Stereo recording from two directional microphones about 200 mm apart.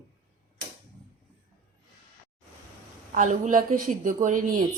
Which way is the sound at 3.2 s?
40° right (ahead or behind).